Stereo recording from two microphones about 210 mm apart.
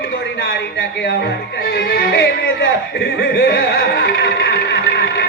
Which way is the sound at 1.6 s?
45° left (ahead or behind).